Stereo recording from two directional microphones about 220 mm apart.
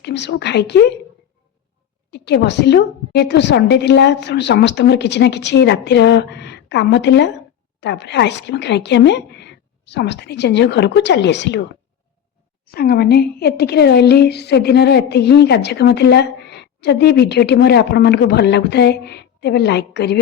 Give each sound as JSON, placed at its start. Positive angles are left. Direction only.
{"t": 0.0, "sound": "a woman's voice", "side_deg": 50}
{"t": 2.0, "sound": "a woman's voice", "side_deg": 50}
{"t": 12.6, "sound": "a woman's voice", "side_deg": 45}